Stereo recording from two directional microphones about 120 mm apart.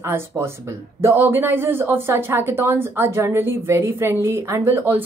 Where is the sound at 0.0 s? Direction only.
20° right (ahead or behind).